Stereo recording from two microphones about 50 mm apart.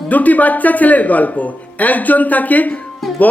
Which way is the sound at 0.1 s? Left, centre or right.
Left.